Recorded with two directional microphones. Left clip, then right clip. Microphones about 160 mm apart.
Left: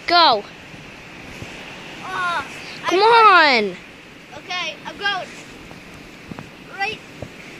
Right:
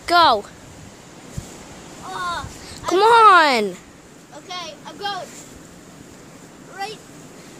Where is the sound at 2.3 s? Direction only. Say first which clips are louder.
Left 4 dB; 10° right (ahead or behind).